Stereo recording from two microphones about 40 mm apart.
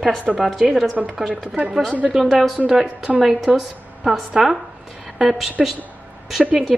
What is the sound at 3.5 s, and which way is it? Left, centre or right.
A woman's voice, centre.